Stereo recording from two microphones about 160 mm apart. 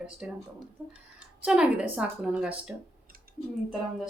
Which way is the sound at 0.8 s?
10° right (ahead or behind).